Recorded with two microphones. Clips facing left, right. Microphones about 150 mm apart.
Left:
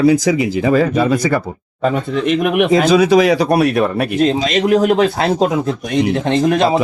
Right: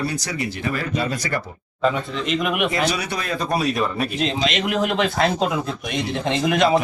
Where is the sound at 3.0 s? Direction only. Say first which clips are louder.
Left 15 dB; 90° left.